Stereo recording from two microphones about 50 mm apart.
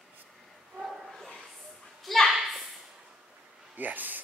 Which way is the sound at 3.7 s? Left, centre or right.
Right.